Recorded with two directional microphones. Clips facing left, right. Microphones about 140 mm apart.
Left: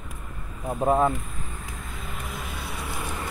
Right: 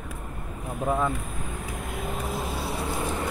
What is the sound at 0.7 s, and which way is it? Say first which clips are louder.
Speech: left 5 dB; 55° left (ahead or behind).